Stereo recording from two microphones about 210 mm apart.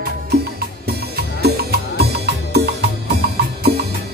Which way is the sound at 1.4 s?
50° right (ahead or behind).